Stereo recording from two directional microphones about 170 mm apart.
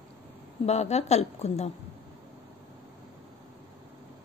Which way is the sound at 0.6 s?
40° left (ahead or behind).